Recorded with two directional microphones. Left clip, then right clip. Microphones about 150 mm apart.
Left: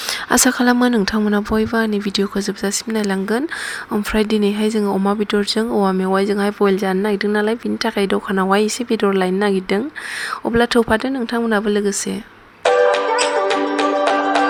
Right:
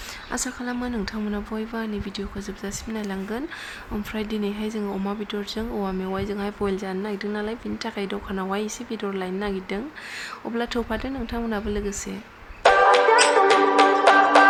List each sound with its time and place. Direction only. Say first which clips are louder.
0.3 s speech: left 15 dB; 60° left (ahead or behind); by 11.9 s 45° left (ahead or behind)
12.6 s music: left 1 dB; centre (ahead or behind)